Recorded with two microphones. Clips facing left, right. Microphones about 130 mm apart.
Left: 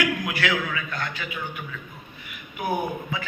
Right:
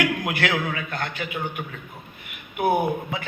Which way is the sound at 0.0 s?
50° right (ahead or behind).